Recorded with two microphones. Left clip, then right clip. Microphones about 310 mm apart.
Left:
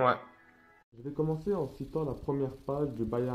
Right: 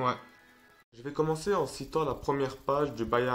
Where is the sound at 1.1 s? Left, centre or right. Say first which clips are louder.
Right 3 dB; right.